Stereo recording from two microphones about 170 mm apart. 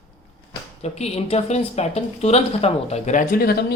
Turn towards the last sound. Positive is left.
turn(degrees=60)  # may be behind; listen again after turning